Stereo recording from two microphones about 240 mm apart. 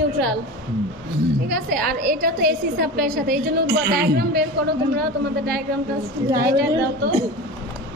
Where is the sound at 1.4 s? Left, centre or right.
Right.